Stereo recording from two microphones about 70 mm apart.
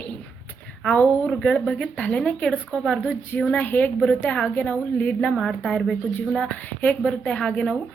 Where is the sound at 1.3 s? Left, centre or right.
Centre.